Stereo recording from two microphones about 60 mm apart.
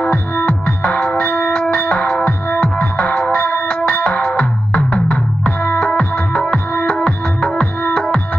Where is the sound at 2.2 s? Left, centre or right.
Left.